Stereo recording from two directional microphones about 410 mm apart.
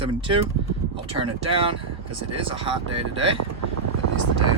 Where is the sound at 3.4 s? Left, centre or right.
Right.